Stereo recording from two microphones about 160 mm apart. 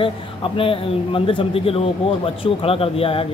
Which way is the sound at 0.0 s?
35° left (ahead or behind).